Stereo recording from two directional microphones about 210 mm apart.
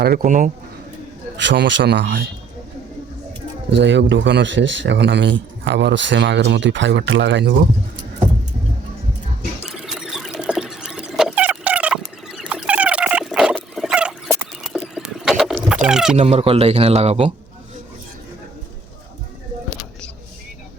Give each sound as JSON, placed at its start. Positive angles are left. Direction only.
{"t": 0.0, "sound": "speech", "side_deg": -45}
{"t": 1.4, "sound": "a man's voice", "side_deg": -60}
{"t": 3.7, "sound": "a man's voice", "side_deg": -55}
{"t": 9.6, "sound": "a sound", "side_deg": 0}
{"t": 14.6, "sound": "frog", "side_deg": 0}
{"t": 16.1, "sound": "speech", "side_deg": -30}